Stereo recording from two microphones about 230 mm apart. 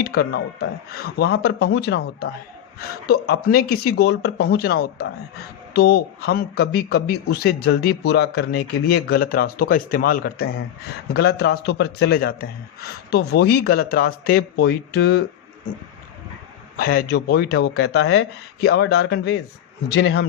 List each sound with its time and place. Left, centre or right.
0.0 s speech: left
16.7 s speech: left